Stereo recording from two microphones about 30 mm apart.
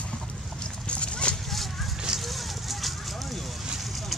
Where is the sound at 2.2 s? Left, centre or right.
Centre.